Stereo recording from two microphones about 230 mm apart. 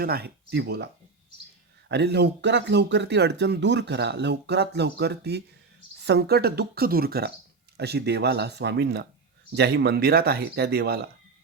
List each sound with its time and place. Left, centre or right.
0.0 s speech: right
1.9 s speech: right